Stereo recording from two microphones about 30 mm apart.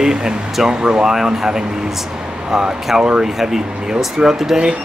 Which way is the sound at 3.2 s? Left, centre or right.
Centre.